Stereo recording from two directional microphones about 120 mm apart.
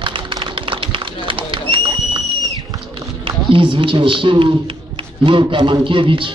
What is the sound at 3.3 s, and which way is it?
A man's voice, 50° right (ahead or behind).